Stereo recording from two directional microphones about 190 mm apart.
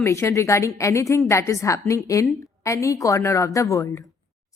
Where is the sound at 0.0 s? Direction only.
15° left (ahead or behind).